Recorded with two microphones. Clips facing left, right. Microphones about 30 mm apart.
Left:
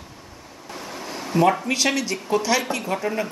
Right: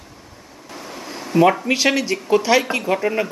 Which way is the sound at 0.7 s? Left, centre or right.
Centre.